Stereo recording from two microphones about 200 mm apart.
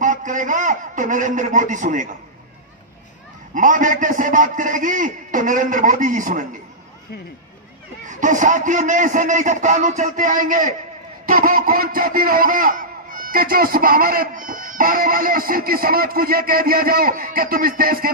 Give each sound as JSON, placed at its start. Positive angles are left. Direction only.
{"t": 0.0, "sound": "a man's voice", "side_deg": -40}
{"t": 3.5, "sound": "a man's voice", "side_deg": -40}
{"t": 8.0, "sound": "a man's voice", "side_deg": -40}